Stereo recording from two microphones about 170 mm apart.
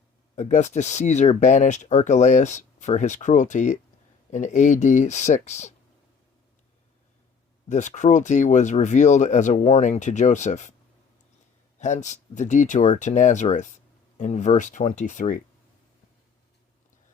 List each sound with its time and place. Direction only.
0.3 s speech: 45° left (ahead or behind)
7.7 s speech: 45° left (ahead or behind)
11.8 s speech: 45° left (ahead or behind)